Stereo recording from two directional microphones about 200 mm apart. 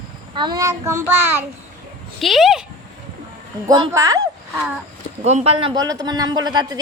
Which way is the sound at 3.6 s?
20° right (ahead or behind).